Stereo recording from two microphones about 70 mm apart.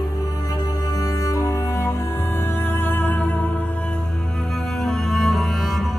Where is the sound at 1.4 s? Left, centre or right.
Left.